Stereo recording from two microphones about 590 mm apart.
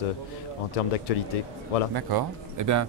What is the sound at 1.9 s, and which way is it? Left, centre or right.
Speech, right.